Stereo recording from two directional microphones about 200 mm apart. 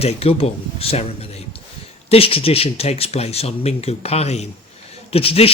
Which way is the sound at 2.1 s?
30° left (ahead or behind).